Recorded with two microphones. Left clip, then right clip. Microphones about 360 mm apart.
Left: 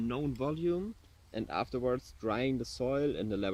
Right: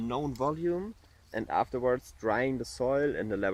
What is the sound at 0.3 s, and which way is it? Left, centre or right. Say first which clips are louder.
Speech: right 3 dB; right.